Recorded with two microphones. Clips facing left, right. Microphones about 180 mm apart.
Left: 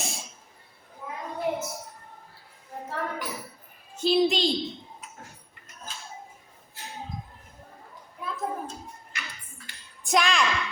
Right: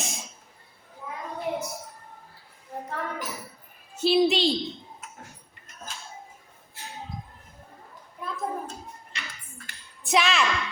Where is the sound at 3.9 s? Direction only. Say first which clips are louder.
Right 1 dB; 5° right (ahead or behind).